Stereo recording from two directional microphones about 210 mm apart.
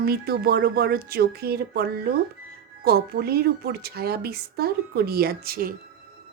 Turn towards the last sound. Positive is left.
turn(degrees=-45)  # may be behind; listen again after turning